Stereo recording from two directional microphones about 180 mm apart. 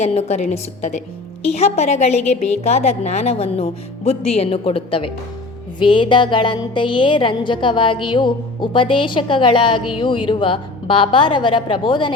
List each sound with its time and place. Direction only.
0.0 s a woman's voice: 35° left (ahead or behind)